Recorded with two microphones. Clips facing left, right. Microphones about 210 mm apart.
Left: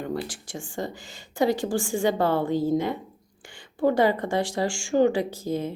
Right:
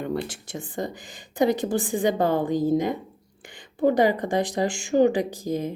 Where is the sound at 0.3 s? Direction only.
20° right (ahead or behind).